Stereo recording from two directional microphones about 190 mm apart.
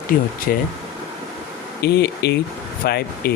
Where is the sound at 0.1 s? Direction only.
50° left (ahead or behind).